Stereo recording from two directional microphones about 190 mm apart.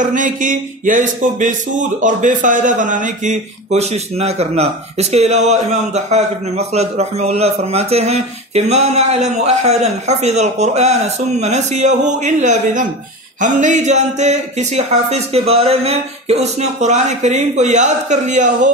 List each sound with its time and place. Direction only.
0.0 s speech: 45° right (ahead or behind)